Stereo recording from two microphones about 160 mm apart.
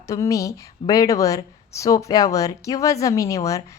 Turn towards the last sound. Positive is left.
turn(degrees=20)  # may be behind; listen again after turning